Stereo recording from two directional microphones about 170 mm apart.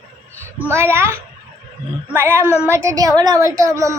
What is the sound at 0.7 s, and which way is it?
Speech, 15° right (ahead or behind).